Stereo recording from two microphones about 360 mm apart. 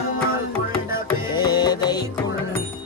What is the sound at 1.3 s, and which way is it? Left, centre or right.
Music, centre.